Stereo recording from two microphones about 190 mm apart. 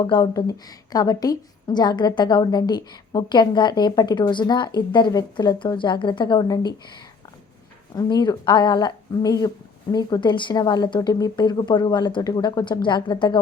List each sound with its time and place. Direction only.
0.0 s a woman's voice: 20° left (ahead or behind)
7.9 s a woman's voice: 20° left (ahead or behind)